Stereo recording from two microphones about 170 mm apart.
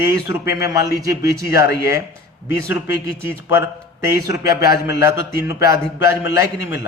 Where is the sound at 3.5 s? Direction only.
15° right (ahead or behind).